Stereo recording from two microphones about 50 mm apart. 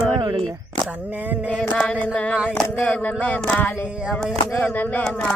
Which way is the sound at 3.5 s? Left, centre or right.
Left.